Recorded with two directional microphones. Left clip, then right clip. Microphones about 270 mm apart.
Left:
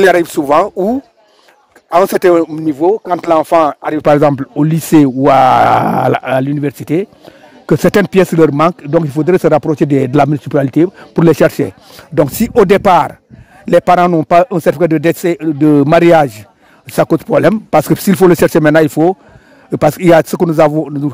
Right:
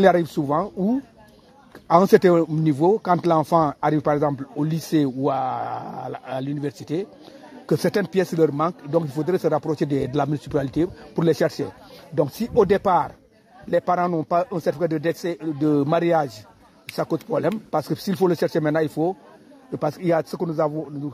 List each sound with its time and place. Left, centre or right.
0.0 s speech: left